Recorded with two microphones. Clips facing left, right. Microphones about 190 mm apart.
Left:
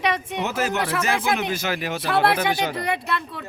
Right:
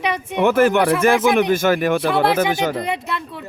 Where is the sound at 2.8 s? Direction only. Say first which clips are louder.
Right 1 dB; 15° right (ahead or behind).